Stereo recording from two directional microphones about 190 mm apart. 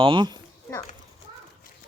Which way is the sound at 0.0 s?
25° right (ahead or behind).